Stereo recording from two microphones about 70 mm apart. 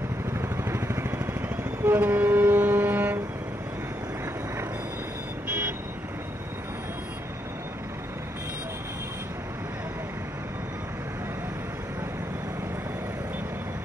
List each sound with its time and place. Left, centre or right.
0.3 s vehicle: right
5.5 s vehicle: right